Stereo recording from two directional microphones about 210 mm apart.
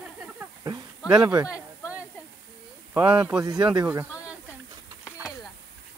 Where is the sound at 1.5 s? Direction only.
5° right (ahead or behind).